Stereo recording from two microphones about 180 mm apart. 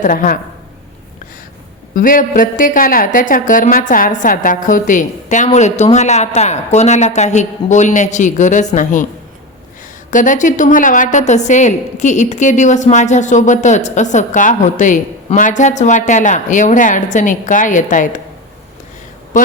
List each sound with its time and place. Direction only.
0.0 s a woman's voice: 50° left (ahead or behind)
2.0 s a woman's voice: 50° left (ahead or behind)
10.1 s a woman's voice: 45° left (ahead or behind)